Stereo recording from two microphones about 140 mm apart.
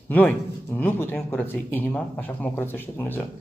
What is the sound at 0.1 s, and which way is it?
A man's voice, 10° left (ahead or behind).